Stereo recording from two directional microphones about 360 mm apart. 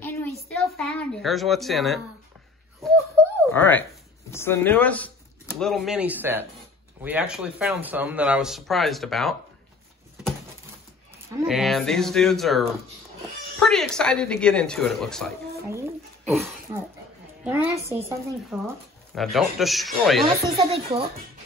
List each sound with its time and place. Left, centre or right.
0.0 s a sound: centre
3.5 s speech: centre
11.4 s a woman's voice: centre
20.5 s a woman's voice: centre